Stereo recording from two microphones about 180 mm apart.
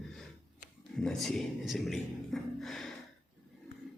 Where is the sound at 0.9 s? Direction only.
Centre (ahead or behind).